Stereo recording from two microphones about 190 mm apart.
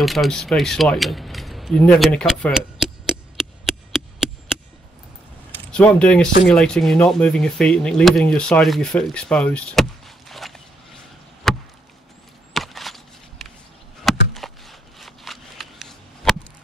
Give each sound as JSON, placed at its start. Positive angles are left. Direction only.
{"t": 0.0, "sound": "speech", "side_deg": 0}
{"t": 3.6, "sound": "chop", "side_deg": 0}
{"t": 5.5, "sound": "speech", "side_deg": 5}
{"t": 11.4, "sound": "chop", "side_deg": 0}
{"t": 12.5, "sound": "walk", "side_deg": 0}
{"t": 14.0, "sound": "a sound", "side_deg": 0}